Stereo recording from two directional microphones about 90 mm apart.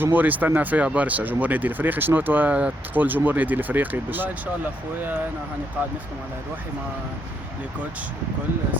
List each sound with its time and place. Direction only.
0.0 s speech: 20° right (ahead or behind)